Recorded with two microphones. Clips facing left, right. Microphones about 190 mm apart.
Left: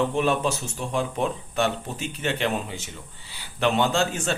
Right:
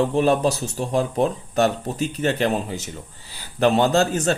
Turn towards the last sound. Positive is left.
turn(degrees=-40)  # may be behind; listen again after turning